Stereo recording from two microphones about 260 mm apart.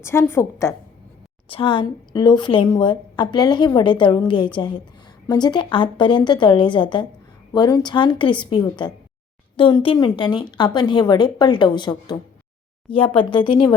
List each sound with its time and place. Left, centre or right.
0.0 s a woman's voice: centre